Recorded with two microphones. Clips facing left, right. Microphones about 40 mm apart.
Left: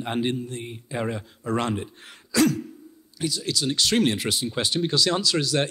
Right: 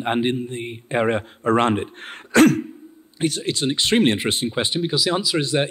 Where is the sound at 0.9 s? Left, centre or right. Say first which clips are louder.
Right 9 dB; right.